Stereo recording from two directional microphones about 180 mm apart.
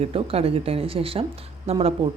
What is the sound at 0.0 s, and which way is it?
A woman's voice, 30° right (ahead or behind).